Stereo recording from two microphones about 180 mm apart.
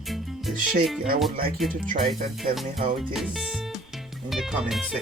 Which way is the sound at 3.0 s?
Centre (ahead or behind).